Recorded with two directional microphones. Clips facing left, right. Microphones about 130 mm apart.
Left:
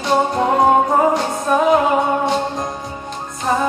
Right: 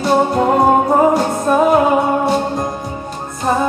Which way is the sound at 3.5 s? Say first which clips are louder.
Right 2 dB; 10° right (ahead or behind).